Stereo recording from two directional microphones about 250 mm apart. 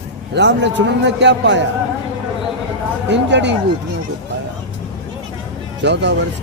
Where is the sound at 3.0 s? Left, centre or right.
Right.